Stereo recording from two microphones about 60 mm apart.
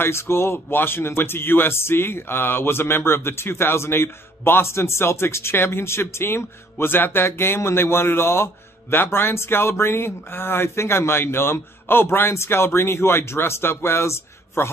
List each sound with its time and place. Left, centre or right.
0.0 s speech: left